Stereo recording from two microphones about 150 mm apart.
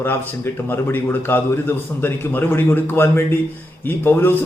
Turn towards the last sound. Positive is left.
turn(degrees=15)  # may be behind; listen again after turning